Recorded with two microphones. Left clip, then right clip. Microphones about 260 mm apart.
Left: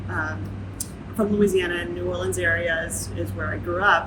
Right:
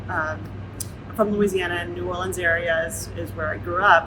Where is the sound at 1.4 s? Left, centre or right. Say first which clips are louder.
Left 1 dB; centre.